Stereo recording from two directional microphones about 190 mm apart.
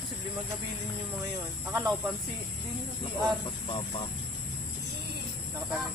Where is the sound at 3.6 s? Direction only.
25° left (ahead or behind).